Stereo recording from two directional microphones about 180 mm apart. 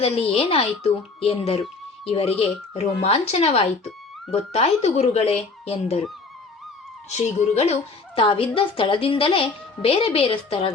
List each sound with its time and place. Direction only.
0.0 s speech: 30° left (ahead or behind)
7.1 s speech: 40° left (ahead or behind)